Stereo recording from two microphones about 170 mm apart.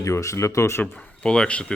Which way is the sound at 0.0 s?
20° left (ahead or behind).